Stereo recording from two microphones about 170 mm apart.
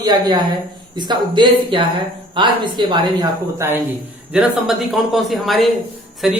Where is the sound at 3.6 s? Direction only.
15° right (ahead or behind).